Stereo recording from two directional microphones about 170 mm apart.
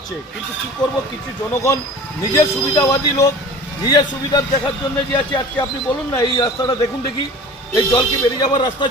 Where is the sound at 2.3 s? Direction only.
20° left (ahead or behind).